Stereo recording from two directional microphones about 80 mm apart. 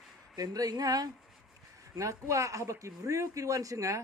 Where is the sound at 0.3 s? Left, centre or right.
Right.